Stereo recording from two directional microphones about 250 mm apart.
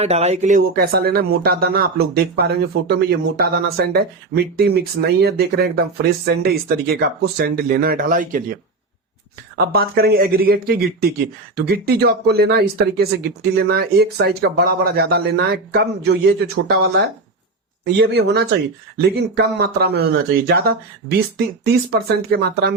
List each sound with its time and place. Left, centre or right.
0.0 s speech: right
9.6 s speech: right